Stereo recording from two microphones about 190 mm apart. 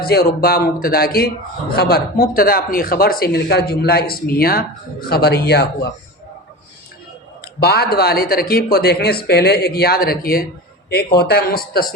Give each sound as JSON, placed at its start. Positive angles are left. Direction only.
{"t": 0.0, "sound": "speech", "side_deg": 55}
{"t": 7.6, "sound": "speech", "side_deg": 55}